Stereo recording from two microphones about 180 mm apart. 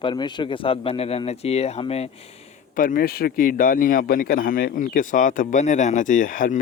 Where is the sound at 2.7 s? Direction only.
50° left (ahead or behind).